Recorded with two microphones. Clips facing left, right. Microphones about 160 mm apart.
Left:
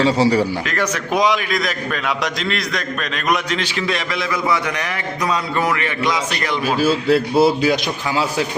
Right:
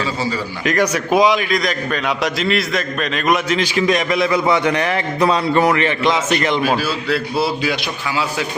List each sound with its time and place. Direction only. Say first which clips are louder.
0.0 s speech: left 7 dB; 70° left (ahead or behind)
0.6 s a man's voice: right 5 dB; 15° right (ahead or behind)
6.8 s a man's voice: left 5 dB; 45° left (ahead or behind)